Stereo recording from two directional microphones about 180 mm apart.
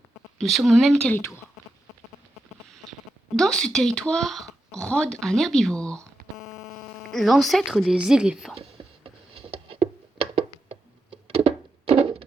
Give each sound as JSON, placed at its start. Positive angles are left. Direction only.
{"t": 0.3, "sound": "speech", "side_deg": 0}
{"t": 3.3, "sound": "speech", "side_deg": 5}
{"t": 6.2, "sound": "a sound", "side_deg": -55}
{"t": 7.1, "sound": "speech", "side_deg": 0}
{"t": 9.0, "sound": "a sound", "side_deg": -30}
{"t": 11.3, "sound": "thunk", "side_deg": -30}